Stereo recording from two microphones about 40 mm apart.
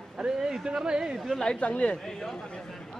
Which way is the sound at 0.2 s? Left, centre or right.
Centre.